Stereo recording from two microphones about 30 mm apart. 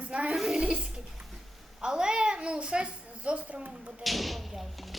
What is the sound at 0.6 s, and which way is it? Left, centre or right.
Speech, right.